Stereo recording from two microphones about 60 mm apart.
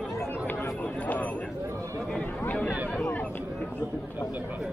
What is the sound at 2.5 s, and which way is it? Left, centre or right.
Chatter, left.